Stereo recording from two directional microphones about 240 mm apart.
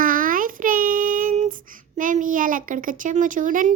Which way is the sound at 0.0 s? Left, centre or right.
Right.